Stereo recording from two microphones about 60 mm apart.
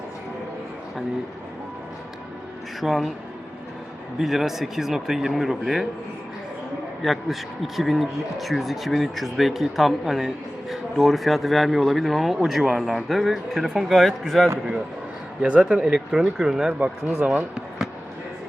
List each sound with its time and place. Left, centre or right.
2.8 s speech: centre
4.2 s speech: centre
7.0 s speech: centre
15.4 s speech: centre
17.2 s speech: right